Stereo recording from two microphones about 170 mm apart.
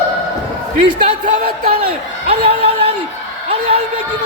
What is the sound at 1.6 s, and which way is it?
A man's voice, 35° right (ahead or behind).